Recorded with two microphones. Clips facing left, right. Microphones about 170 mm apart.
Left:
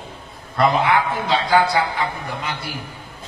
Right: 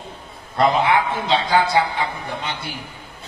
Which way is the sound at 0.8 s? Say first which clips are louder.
Even; 25° right (ahead or behind).